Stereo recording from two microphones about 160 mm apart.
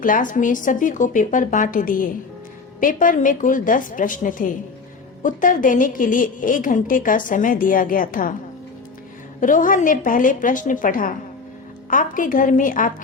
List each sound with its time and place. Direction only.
0.0 s a woman's voice: 55° left (ahead or behind)
9.4 s a woman's voice: 55° left (ahead or behind)